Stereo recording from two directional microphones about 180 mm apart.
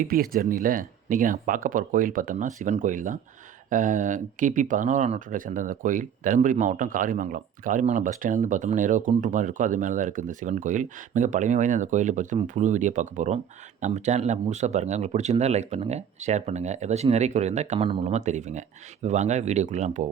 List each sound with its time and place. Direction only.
0.0 s speech: 50° right (ahead or behind)